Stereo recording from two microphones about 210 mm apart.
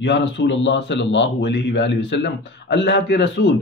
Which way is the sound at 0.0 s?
55° left (ahead or behind).